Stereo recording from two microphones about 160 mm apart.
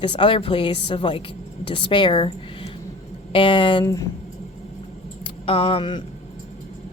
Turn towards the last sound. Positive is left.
turn(degrees=30)  # may be behind; listen again after turning